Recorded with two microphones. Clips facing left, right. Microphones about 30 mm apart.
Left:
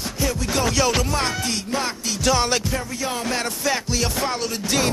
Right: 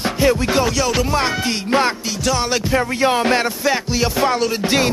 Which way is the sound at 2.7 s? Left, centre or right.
Right.